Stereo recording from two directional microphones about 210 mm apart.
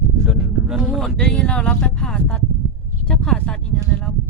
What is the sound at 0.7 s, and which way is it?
A woman's voice, centre (ahead or behind).